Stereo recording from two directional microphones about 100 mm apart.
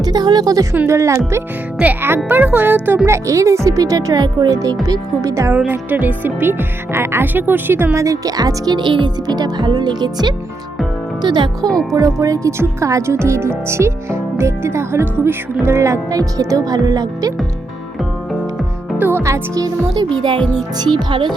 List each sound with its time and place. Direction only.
0.0 s speech: 45° right (ahead or behind)
0.7 s speech: 25° right (ahead or behind)
1.8 s speech: 20° right (ahead or behind)
3.2 s speech: 30° right (ahead or behind)
5.5 s speech: 15° right (ahead or behind); by 11.7 s 45° right (ahead or behind)
11.7 s music: 5° left (ahead or behind)
11.9 s speech: 35° right (ahead or behind)
18.9 s speech: 20° right (ahead or behind); by 20.1 s 40° right (ahead or behind)